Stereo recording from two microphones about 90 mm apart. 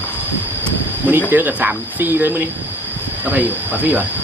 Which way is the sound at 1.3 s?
20° right (ahead or behind).